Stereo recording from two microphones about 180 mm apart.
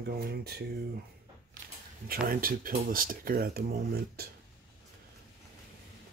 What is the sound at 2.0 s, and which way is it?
Speech, 55° right (ahead or behind).